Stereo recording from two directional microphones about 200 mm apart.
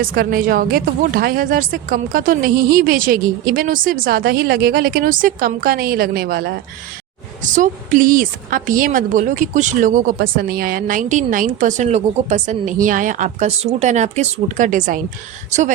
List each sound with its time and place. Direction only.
0.0 s speech: 45° right (ahead or behind)
7.4 s a woman's voice: 40° right (ahead or behind)